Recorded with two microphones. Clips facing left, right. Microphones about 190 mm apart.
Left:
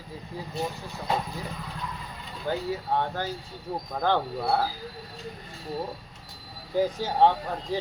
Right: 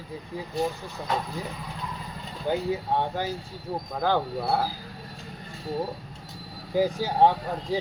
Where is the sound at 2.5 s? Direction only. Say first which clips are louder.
Right 2 dB; 15° right (ahead or behind).